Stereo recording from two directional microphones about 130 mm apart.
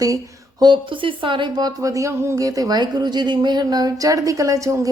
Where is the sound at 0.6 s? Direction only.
40° right (ahead or behind).